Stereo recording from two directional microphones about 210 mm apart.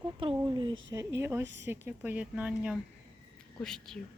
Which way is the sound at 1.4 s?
55° right (ahead or behind).